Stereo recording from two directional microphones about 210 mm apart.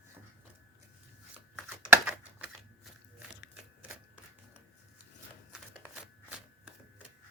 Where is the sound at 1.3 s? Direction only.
5° right (ahead or behind).